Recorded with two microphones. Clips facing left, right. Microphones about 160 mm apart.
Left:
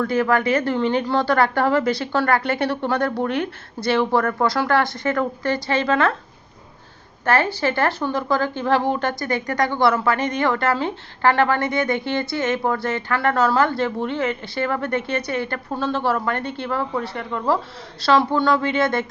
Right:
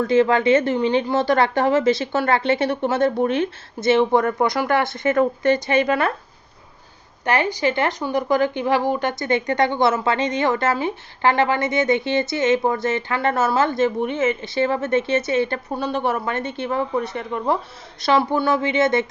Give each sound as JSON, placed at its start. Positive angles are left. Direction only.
{"t": 0.0, "sound": "speech", "side_deg": -20}
{"t": 7.3, "sound": "speech", "side_deg": -15}